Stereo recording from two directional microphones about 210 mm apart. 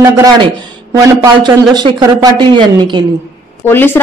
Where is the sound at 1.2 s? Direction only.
20° right (ahead or behind).